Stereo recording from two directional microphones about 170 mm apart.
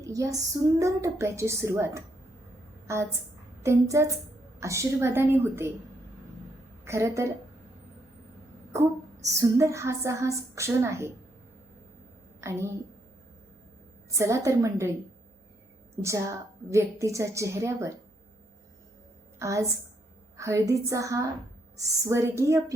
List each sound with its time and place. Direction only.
0.0 s female singing: 20° right (ahead or behind)
0.8 s a woman's voice: 20° right (ahead or behind)
6.8 s a woman's voice: 15° right (ahead or behind)
8.7 s a woman's voice: 20° right (ahead or behind)
12.4 s a woman's voice: 15° right (ahead or behind)
14.1 s a woman's voice: 15° right (ahead or behind)
16.0 s a woman's voice: 15° right (ahead or behind)
19.4 s a woman's voice: 20° right (ahead or behind)